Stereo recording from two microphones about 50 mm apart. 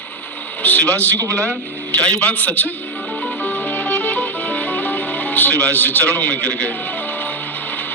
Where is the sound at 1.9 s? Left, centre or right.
Left.